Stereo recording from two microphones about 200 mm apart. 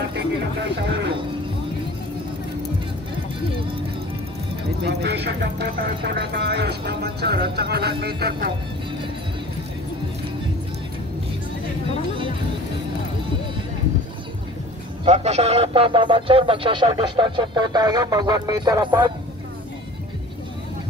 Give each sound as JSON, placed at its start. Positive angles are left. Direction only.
{"t": 0.1, "sound": "speech", "side_deg": -55}
{"t": 4.8, "sound": "speech", "side_deg": -55}
{"t": 15.0, "sound": "speech", "side_deg": -35}